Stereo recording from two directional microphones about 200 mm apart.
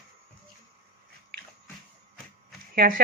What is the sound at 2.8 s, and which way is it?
Speech, 45° right (ahead or behind).